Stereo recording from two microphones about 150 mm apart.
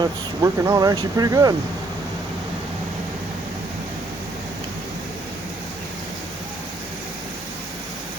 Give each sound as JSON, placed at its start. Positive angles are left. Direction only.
{"t": 0.0, "sound": "speech", "side_deg": -25}